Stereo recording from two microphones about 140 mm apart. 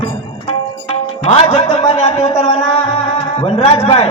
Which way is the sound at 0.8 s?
45° left (ahead or behind).